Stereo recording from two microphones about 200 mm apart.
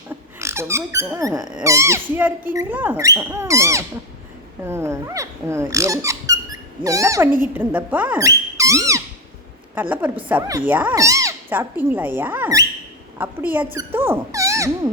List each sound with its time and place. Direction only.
0.3 s a sound: 15° right (ahead or behind)
1.6 s speech: 15° right (ahead or behind)
8.5 s dog: 15° right (ahead or behind)
9.8 s speech: 10° right (ahead or behind)